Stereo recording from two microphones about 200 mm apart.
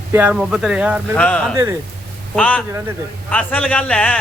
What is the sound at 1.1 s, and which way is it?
A man's voice, 5° left (ahead or behind).